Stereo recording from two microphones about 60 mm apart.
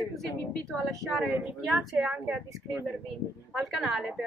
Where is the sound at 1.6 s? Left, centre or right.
Centre.